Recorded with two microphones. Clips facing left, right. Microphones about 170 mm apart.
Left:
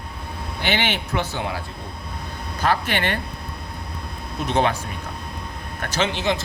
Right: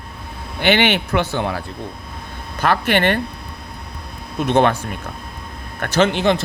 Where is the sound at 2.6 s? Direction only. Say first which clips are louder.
Right 5 dB; 65° right (ahead or behind).